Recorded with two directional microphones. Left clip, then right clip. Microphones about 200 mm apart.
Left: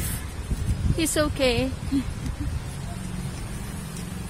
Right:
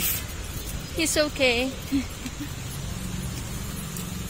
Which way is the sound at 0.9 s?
20° left (ahead or behind).